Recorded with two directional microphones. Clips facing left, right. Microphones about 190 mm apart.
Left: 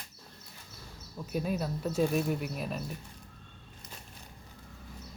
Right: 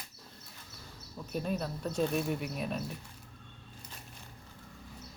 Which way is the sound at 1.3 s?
5° left (ahead or behind).